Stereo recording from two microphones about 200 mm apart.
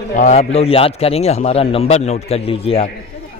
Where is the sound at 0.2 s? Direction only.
35° left (ahead or behind).